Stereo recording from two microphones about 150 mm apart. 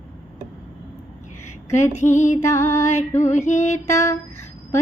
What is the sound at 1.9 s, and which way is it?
Female singing, 50° left (ahead or behind).